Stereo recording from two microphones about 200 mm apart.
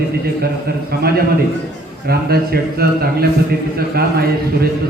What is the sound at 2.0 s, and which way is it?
A man's voice, 50° right (ahead or behind).